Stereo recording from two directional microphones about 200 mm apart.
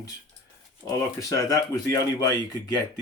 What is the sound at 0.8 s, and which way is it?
Speech, 15° left (ahead or behind).